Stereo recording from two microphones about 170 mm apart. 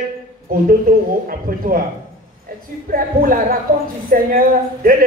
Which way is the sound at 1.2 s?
55° right (ahead or behind).